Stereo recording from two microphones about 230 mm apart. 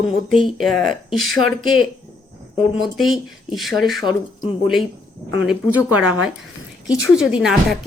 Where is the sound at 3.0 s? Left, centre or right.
Centre.